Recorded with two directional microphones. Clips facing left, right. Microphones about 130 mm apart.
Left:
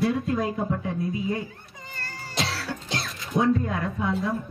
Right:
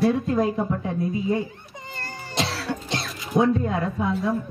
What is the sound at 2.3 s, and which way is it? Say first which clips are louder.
Cough: right 3 dB; centre (ahead or behind).